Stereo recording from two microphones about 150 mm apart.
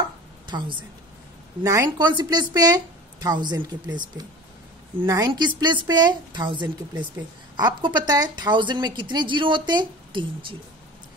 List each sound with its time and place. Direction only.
0.5 s a woman's voice: 30° right (ahead or behind)
1.6 s a woman's voice: 20° right (ahead or behind)